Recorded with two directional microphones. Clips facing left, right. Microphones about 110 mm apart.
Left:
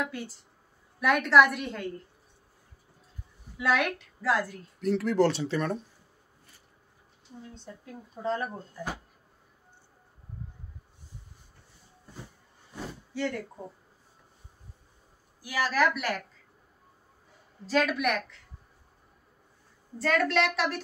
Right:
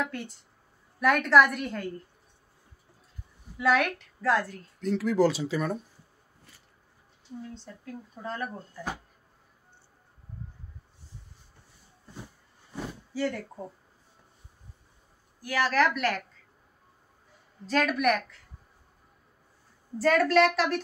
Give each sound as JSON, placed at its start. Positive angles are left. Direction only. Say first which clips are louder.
{"t": 0.0, "sound": "a woman's voice", "louder": "right 1 dB", "side_deg": 0}
{"t": 3.6, "sound": "a woman's voice", "louder": "right 2 dB", "side_deg": 0}
{"t": 7.5, "sound": "speech", "louder": "right 2 dB", "side_deg": 20}
{"t": 13.1, "sound": "speech", "louder": "right 1 dB", "side_deg": -5}
{"t": 15.4, "sound": "a woman's voice", "louder": "right 1 dB", "side_deg": 5}
{"t": 17.6, "sound": "a woman's voice", "louder": "right 1 dB", "side_deg": 0}
{"t": 20.0, "sound": "a woman's voice", "louder": "right 4 dB", "side_deg": -5}